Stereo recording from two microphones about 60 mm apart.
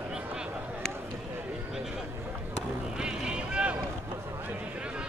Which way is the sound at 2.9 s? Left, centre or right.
Centre.